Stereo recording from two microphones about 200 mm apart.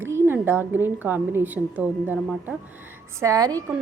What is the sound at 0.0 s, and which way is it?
A woman's voice, 10° right (ahead or behind).